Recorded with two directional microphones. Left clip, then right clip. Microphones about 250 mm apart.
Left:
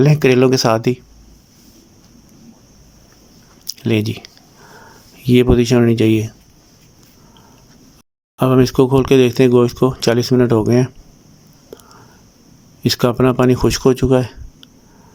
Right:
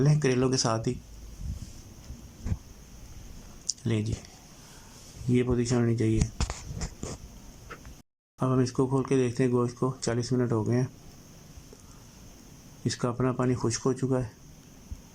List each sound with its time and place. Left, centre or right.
0.0 s speech: left
3.7 s a sound: left
5.3 s speech: left
8.4 s speech: left
12.8 s speech: left